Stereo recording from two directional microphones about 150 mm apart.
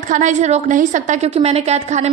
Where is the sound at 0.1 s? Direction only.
55° right (ahead or behind).